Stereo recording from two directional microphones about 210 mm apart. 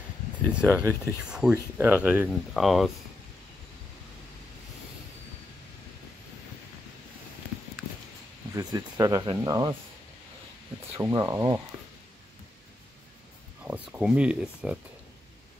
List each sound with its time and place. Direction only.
0.5 s speech: 5° right (ahead or behind)
8.5 s speech: 15° right (ahead or behind)
11.0 s speech: 15° right (ahead or behind)
13.7 s speech: 5° right (ahead or behind)